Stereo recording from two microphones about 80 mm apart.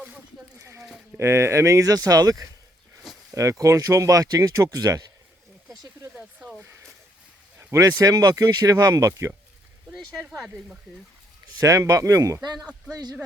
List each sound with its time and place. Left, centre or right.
0.6 s speech: right
6.1 s a sound: centre
7.7 s speech: right
11.6 s speech: right
12.9 s speech: right